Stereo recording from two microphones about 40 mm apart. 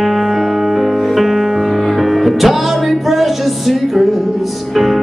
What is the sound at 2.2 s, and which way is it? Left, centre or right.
Music, centre.